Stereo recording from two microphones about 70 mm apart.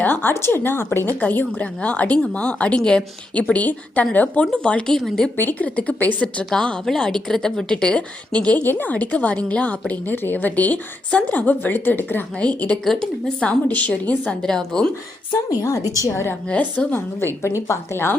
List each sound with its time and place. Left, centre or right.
0.0 s a woman's voice: left
4.5 s a woman's voice: centre
5.4 s a woman's voice: left
12.4 s a woman's voice: centre
12.8 s a woman's voice: centre
13.7 s a woman's voice: left
14.4 s a woman's voice: centre
16.0 s speech: left
16.5 s a woman's voice: left